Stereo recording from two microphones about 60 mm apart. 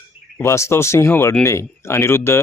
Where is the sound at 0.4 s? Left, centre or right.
Left.